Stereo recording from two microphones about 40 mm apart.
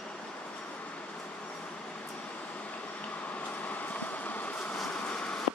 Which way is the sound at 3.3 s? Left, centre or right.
Left.